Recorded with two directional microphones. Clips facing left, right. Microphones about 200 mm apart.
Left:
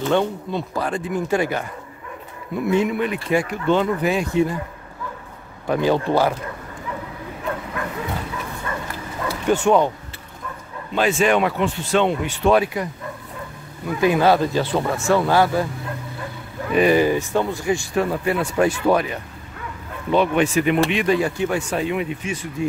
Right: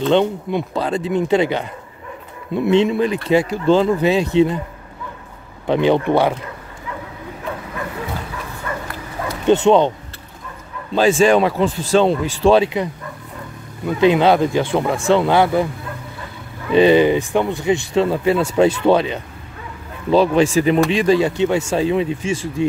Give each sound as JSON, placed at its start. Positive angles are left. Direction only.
{"t": 0.1, "sound": "speech", "side_deg": -20}
{"t": 5.7, "sound": "speech", "side_deg": -20}
{"t": 9.5, "sound": "speech", "side_deg": -20}
{"t": 11.0, "sound": "speech", "side_deg": -30}
{"t": 13.8, "sound": "speech", "side_deg": -20}
{"t": 16.7, "sound": "speech", "side_deg": -25}